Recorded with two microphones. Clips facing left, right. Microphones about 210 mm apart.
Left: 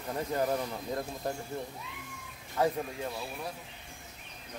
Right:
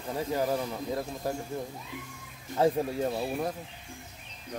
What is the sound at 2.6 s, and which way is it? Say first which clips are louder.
Speech: right 5 dB; 40° right (ahead or behind).